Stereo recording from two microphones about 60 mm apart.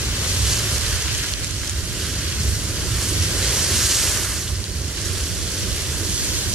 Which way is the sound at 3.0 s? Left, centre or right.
Centre.